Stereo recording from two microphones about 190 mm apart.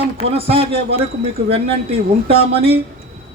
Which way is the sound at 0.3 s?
30° right (ahead or behind).